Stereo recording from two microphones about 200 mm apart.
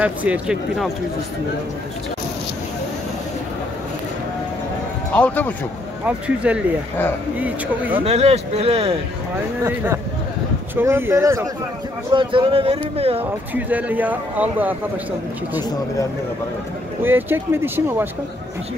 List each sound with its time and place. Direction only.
0.0 s speech: 5° right (ahead or behind)
5.1 s speech: 5° left (ahead or behind)
6.0 s speech: 5° right (ahead or behind)
8.0 s speech: 30° right (ahead or behind)
9.6 s speech: 10° right (ahead or behind)
12.1 s speech: 25° right (ahead or behind)
13.2 s speech: 10° right (ahead or behind)
17.0 s speech: 10° right (ahead or behind)